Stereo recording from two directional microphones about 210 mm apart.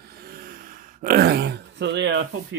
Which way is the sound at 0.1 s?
45° right (ahead or behind).